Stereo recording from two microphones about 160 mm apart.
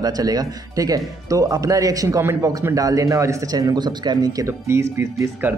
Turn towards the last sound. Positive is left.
turn(degrees=-20)  # may be behind; listen again after turning